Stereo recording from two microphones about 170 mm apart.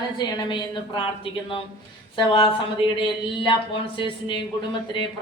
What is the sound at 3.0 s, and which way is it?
Speech, 30° left (ahead or behind).